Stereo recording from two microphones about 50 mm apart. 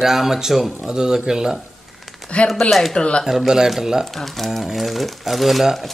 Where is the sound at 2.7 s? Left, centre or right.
Centre.